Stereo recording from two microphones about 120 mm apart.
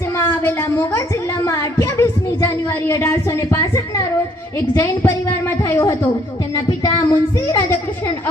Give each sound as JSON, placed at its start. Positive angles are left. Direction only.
{"t": 0.2, "sound": "a woman's voice", "side_deg": 20}